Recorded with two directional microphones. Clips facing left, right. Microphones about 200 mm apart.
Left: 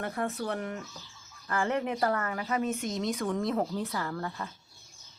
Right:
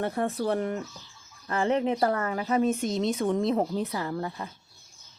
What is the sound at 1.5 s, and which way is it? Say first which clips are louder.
Speech: right 4 dB; 25° right (ahead or behind).